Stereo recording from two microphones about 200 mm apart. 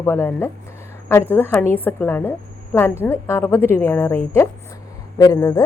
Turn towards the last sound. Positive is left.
turn(degrees=15)  # may be behind; listen again after turning